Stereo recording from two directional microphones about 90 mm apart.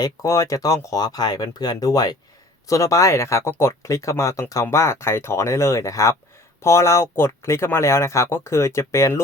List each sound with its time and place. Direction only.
0.0 s speech: 35° left (ahead or behind)